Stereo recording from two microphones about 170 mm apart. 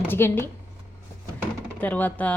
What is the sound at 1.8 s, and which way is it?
Speech, 10° left (ahead or behind).